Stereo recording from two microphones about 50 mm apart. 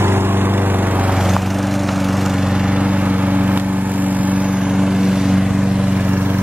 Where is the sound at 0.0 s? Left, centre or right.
Right.